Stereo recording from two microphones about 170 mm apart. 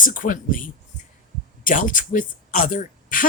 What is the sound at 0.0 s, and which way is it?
Speech, 55° left (ahead or behind).